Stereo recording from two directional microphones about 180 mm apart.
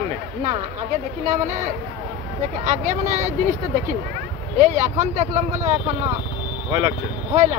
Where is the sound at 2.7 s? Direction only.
45° right (ahead or behind).